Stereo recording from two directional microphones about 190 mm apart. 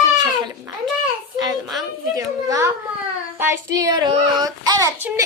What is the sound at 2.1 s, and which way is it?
A woman's voice, 15° right (ahead or behind).